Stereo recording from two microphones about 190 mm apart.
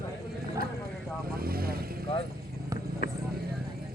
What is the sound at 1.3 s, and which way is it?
Vehicle, 50° right (ahead or behind).